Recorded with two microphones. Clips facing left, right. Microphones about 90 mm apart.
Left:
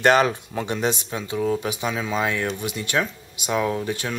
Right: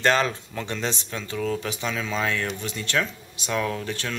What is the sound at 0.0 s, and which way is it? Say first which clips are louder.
Speech: left 4 dB; 15° left (ahead or behind).